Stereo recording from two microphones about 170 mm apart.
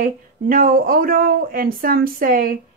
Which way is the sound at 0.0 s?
55° right (ahead or behind).